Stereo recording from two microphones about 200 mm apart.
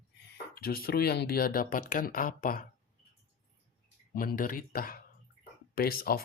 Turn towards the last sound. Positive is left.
turn(degrees=50)  # may be behind; listen again after turning